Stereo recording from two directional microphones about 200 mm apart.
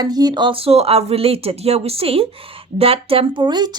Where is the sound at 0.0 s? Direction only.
20° right (ahead or behind).